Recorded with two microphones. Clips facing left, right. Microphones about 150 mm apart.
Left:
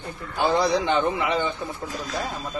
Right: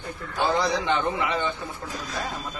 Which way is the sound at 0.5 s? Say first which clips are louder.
Left 4 dB; 15° left (ahead or behind).